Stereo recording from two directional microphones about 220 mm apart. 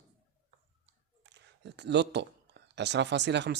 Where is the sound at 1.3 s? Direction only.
50° right (ahead or behind).